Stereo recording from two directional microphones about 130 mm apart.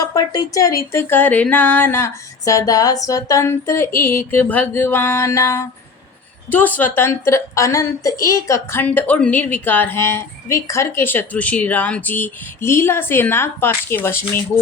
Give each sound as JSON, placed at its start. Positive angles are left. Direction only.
{"t": 0.0, "sound": "a woman's voice", "side_deg": 30}